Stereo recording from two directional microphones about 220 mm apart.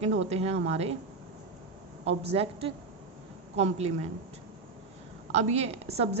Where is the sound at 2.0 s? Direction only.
30° right (ahead or behind).